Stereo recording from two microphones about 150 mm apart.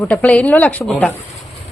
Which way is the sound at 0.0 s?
10° left (ahead or behind).